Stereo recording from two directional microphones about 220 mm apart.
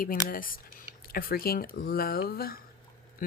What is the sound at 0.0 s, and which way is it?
Speech, 40° left (ahead or behind).